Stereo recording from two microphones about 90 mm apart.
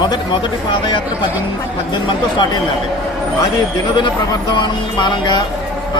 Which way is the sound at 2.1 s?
65° left (ahead or behind).